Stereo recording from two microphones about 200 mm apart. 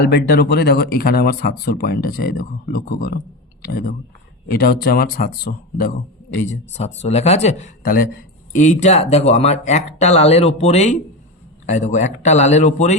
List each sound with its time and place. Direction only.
0.1 s speech: 50° left (ahead or behind); by 13.0 s 35° left (ahead or behind)